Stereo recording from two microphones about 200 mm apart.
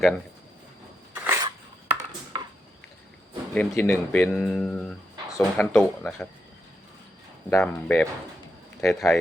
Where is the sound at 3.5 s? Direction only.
10° left (ahead or behind).